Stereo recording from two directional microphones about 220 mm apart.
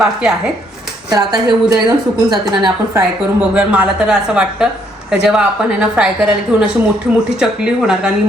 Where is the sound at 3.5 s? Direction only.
5° right (ahead or behind).